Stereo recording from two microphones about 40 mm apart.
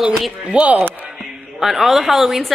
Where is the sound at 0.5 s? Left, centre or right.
Right.